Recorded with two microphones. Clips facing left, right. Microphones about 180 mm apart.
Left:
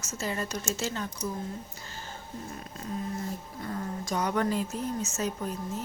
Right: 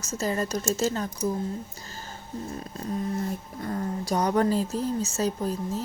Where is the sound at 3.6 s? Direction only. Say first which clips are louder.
Right 5 dB; 40° right (ahead or behind).